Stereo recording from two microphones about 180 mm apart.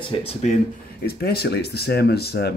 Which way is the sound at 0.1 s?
35° left (ahead or behind).